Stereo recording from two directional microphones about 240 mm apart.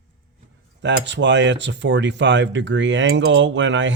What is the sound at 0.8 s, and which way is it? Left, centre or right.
Speech, right.